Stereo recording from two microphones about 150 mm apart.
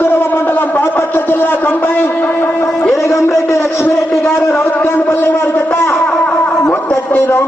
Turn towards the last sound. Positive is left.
turn(degrees=15)  # may be behind; listen again after turning